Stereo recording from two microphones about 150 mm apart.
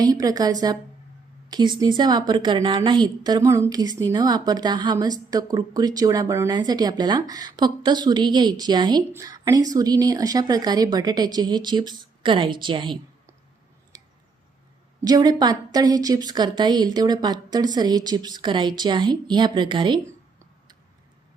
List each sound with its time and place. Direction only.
0.0 s speech: 25° right (ahead or behind)
13.9 s a sound: 30° right (ahead or behind)
15.0 s speech: 25° right (ahead or behind)